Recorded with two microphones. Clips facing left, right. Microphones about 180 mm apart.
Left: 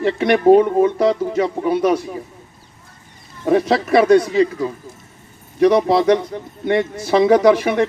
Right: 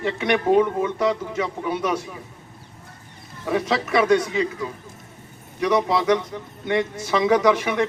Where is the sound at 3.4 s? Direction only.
40° left (ahead or behind).